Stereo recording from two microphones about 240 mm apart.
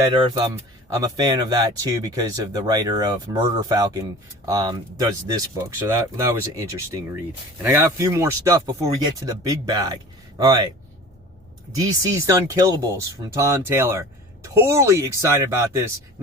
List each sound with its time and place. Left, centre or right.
0.1 s speech: centre
11.8 s speech: centre